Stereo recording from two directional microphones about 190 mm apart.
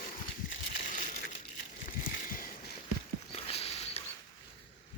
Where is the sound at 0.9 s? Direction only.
45° left (ahead or behind).